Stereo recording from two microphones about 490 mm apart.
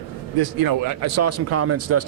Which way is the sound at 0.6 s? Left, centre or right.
Right.